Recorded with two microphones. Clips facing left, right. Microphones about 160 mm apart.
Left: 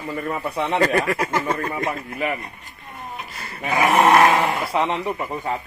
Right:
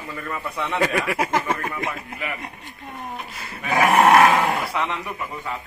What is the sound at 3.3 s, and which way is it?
Dog, centre (ahead or behind).